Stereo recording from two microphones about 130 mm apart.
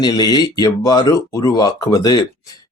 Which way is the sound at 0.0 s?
30° left (ahead or behind).